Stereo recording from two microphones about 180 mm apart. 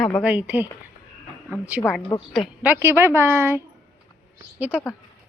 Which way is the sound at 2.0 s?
30° left (ahead or behind).